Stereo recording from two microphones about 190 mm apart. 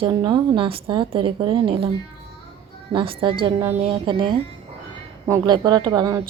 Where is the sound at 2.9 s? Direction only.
25° right (ahead or behind).